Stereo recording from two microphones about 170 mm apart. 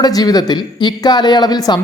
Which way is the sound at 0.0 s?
20° left (ahead or behind).